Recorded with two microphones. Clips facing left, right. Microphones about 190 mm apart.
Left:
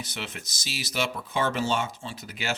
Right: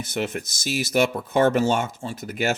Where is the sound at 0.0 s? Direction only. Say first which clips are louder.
Right 10 dB; 50° right (ahead or behind).